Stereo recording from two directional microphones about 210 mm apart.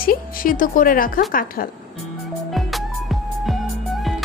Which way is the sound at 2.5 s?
Centre (ahead or behind).